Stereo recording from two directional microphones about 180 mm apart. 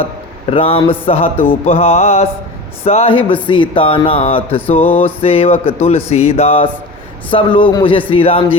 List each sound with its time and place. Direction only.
0.5 s a man's voice: 30° left (ahead or behind)